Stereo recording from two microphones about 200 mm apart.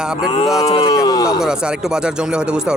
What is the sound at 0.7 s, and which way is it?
Speech, 30° left (ahead or behind).